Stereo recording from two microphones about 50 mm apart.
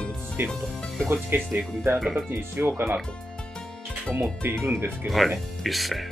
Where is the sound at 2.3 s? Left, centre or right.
Right.